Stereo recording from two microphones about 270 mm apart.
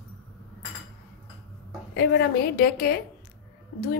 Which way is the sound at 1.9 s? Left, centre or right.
Left.